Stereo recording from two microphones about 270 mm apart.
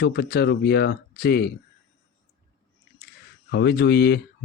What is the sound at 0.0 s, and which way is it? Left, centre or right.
A man's voice, left.